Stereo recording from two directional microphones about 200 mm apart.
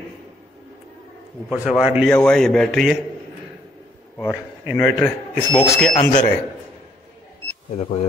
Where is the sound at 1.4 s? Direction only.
5° right (ahead or behind).